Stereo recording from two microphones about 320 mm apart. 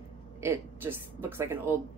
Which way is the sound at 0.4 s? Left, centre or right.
Centre.